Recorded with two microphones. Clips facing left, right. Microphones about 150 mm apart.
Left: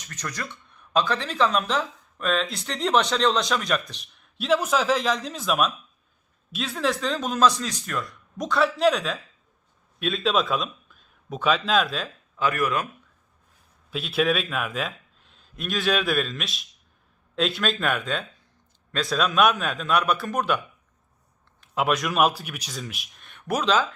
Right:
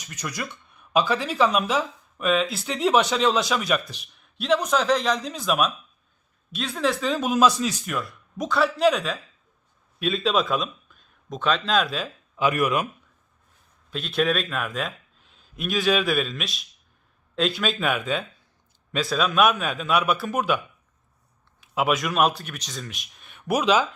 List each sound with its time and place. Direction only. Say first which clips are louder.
0.0 s speech: right 2 dB; 10° right (ahead or behind)
12.4 s speech: right 2 dB; 15° right (ahead or behind)
13.9 s a man's voice: even; 5° left (ahead or behind)
21.6 s speech: right 1 dB; 5° right (ahead or behind)